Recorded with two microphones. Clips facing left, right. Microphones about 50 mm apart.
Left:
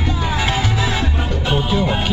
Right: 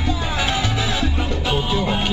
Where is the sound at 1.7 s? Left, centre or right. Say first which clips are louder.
Left 2 dB; left.